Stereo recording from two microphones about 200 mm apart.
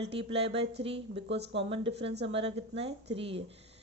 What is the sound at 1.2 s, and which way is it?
Speech, 60° right (ahead or behind).